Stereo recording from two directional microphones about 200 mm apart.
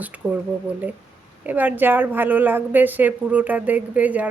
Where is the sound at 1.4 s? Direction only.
10° right (ahead or behind).